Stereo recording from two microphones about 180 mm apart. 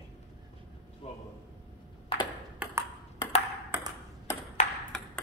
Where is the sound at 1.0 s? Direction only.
35° left (ahead or behind).